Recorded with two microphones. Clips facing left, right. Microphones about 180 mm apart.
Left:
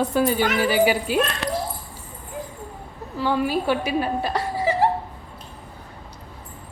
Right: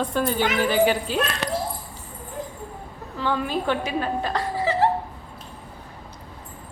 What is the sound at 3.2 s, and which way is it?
A woman's voice, 10° left (ahead or behind).